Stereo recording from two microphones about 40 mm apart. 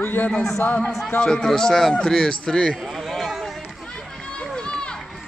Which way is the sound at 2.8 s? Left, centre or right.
Centre.